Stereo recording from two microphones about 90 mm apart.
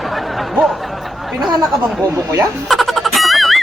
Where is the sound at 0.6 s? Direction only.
Centre (ahead or behind).